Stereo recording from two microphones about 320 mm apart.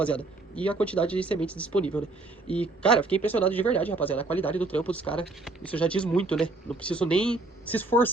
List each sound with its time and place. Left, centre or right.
0.0 s speech: centre